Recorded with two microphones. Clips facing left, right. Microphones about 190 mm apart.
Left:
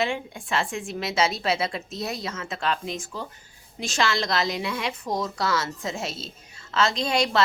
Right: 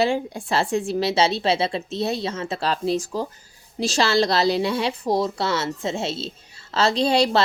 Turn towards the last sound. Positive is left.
turn(degrees=-35)  # may be behind; listen again after turning